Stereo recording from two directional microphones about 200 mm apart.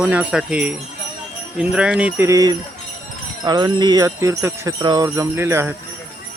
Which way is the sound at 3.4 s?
20° right (ahead or behind).